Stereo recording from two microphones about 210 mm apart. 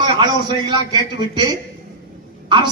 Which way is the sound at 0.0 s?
20° right (ahead or behind).